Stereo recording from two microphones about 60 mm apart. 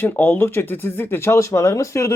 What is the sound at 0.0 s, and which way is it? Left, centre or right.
Speech, left.